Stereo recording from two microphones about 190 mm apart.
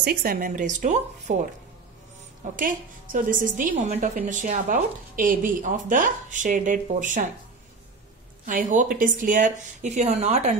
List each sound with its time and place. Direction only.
0.0 s speech: 55° right (ahead or behind)
2.5 s a woman's voice: 45° right (ahead or behind)
8.5 s a woman's voice: 45° right (ahead or behind)